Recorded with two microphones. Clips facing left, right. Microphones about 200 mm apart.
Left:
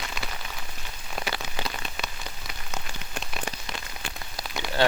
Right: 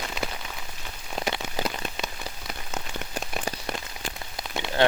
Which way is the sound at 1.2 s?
30° right (ahead or behind).